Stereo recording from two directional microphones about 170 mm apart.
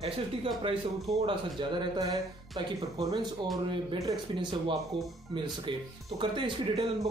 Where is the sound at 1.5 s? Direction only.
25° right (ahead or behind).